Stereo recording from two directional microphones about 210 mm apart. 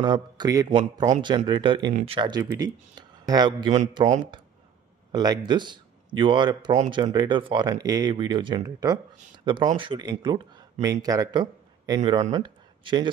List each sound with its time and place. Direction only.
0.0 s speech: 20° right (ahead or behind)
5.1 s speech: 20° right (ahead or behind)